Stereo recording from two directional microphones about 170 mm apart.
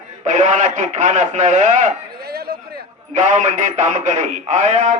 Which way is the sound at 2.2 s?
65° right (ahead or behind).